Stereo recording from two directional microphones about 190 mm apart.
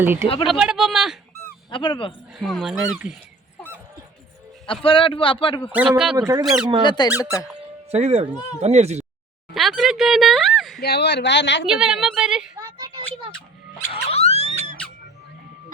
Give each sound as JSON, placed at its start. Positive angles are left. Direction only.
{"t": 0.0, "sound": "speech", "side_deg": -10}
{"t": 1.7, "sound": "a man's voice", "side_deg": 25}
{"t": 2.3, "sound": "speech", "side_deg": 0}
{"t": 4.6, "sound": "a man's voice", "side_deg": 30}
{"t": 6.1, "sound": "speech", "side_deg": -20}
{"t": 6.4, "sound": "speech", "side_deg": 0}
{"t": 6.8, "sound": "a man's voice", "side_deg": 25}
{"t": 7.9, "sound": "speech", "side_deg": -35}
{"t": 9.6, "sound": "speech", "side_deg": 0}
{"t": 10.8, "sound": "speech", "side_deg": 60}
{"t": 11.6, "sound": "speech", "side_deg": -5}
{"t": 12.5, "sound": "a sound", "side_deg": -20}
{"t": 13.9, "sound": "dog", "side_deg": 30}